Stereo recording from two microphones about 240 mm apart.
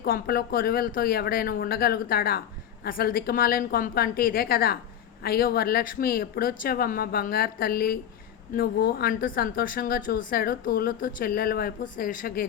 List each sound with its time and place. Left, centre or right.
0.0 s speech: left